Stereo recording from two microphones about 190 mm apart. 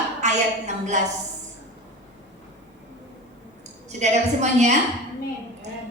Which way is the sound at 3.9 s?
35° right (ahead or behind).